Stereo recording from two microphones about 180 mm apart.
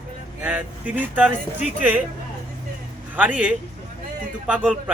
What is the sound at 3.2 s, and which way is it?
Speech, 10° right (ahead or behind).